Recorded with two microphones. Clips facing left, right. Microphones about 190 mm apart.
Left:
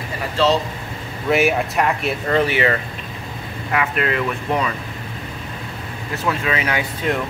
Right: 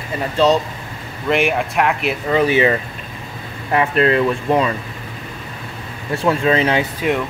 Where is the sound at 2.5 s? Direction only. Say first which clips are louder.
Right 4 dB; 20° right (ahead or behind).